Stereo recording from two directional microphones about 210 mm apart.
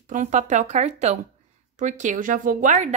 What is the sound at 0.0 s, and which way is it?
A woman's voice, 35° right (ahead or behind).